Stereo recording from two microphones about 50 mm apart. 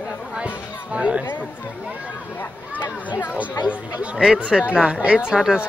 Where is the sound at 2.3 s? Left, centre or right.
Left.